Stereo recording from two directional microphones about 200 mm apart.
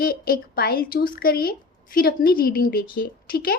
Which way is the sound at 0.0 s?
50° left (ahead or behind).